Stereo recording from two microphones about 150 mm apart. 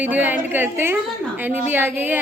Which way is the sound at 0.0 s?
10° right (ahead or behind).